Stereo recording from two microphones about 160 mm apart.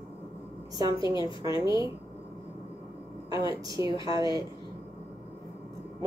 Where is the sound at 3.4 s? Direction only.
30° left (ahead or behind).